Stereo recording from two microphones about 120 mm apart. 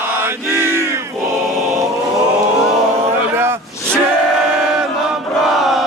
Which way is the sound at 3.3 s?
20° right (ahead or behind).